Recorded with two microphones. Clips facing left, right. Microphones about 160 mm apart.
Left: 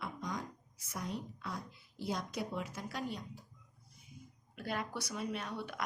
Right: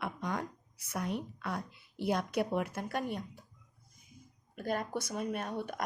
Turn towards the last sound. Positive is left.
turn(degrees=-50)  # may be behind; listen again after turning